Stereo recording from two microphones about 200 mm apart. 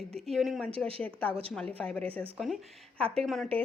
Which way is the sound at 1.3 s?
30° right (ahead or behind).